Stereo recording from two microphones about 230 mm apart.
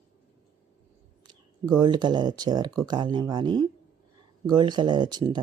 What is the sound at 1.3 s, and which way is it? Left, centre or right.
Speech, centre.